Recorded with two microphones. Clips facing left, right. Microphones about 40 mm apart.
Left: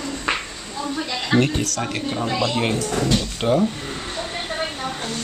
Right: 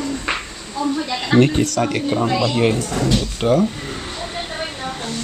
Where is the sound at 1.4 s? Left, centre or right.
Centre.